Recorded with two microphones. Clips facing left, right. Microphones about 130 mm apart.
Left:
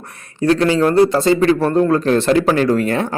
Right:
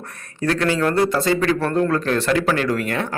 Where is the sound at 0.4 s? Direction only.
25° left (ahead or behind).